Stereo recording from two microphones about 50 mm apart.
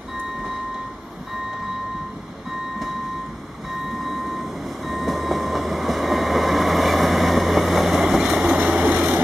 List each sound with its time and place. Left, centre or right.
4.0 s train: centre
8.5 s vehicle: centre